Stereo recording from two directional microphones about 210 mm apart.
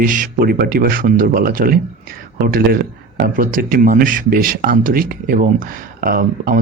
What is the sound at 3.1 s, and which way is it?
Speech, 45° right (ahead or behind).